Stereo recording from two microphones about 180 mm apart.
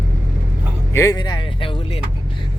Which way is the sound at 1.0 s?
20° left (ahead or behind).